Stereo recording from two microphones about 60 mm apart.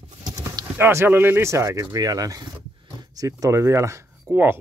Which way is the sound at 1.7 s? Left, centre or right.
Right.